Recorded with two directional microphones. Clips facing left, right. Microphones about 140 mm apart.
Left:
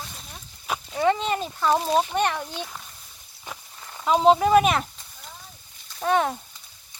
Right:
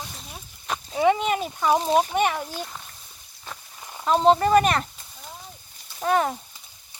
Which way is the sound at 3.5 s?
15° left (ahead or behind).